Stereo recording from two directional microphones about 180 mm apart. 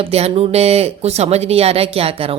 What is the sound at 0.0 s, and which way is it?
Speech, 35° right (ahead or behind).